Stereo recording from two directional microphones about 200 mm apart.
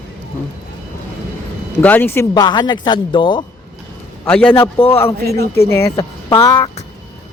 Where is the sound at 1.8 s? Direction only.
10° left (ahead or behind).